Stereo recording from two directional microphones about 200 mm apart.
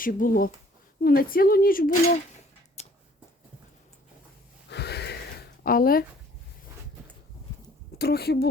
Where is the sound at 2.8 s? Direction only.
35° left (ahead or behind).